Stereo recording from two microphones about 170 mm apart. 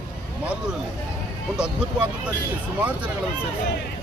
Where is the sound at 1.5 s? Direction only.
5° right (ahead or behind).